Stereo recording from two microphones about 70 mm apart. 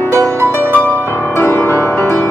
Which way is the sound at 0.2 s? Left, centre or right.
Right.